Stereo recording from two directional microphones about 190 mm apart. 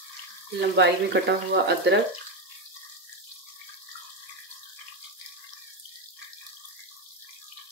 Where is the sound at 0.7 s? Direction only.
65° right (ahead or behind).